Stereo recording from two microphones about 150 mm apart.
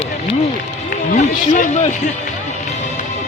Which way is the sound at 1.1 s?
60° left (ahead or behind).